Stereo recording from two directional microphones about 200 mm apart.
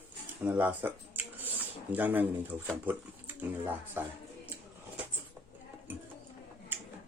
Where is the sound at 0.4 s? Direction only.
10° right (ahead or behind).